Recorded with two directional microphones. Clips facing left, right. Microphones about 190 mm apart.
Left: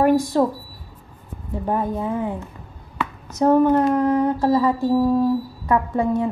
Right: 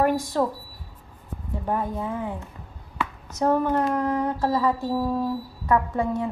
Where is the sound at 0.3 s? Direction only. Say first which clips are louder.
Left 5 dB; 20° left (ahead or behind).